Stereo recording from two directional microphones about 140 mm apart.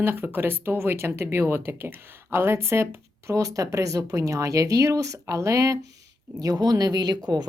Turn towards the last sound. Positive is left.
turn(degrees=-30)  # may be behind; listen again after turning